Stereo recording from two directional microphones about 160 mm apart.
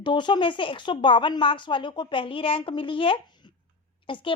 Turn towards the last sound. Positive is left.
turn(degrees=30)  # may be behind; listen again after turning